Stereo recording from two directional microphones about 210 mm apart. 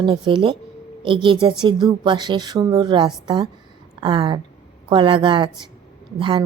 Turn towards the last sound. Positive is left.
turn(degrees=-25)  # may be behind; listen again after turning